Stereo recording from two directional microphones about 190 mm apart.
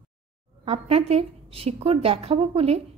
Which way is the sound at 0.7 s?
30° right (ahead or behind).